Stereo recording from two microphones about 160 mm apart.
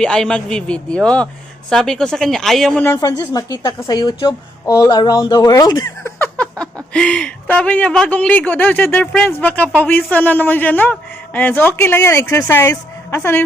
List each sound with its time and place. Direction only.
0.0 s a man's voice: 5° left (ahead or behind)
2.8 s speech: 20° left (ahead or behind)
6.0 s a sound: 10° left (ahead or behind)
6.9 s speech: 5° left (ahead or behind)